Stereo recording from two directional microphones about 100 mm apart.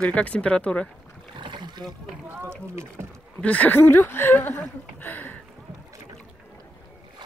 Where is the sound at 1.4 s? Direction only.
50° right (ahead or behind).